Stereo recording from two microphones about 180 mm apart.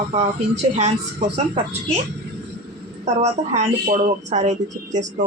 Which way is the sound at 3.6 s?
40° right (ahead or behind).